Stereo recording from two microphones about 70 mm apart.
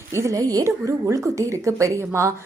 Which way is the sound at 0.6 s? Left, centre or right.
Right.